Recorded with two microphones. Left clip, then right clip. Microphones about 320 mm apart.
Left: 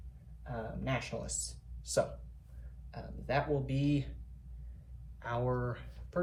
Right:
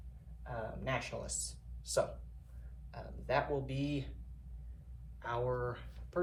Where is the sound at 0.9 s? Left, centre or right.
Centre.